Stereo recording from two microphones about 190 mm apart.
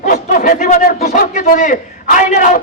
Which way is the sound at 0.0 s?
45° left (ahead or behind).